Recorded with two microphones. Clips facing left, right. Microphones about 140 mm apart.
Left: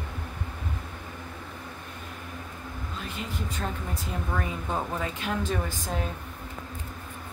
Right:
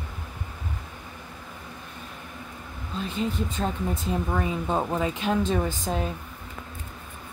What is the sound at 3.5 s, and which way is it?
Speech, 25° right (ahead or behind).